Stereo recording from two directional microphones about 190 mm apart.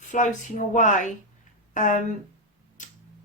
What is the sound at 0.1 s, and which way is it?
Speech, 40° left (ahead or behind).